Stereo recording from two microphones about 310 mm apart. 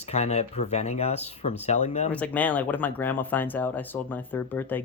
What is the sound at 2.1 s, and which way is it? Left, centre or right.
Speech, centre.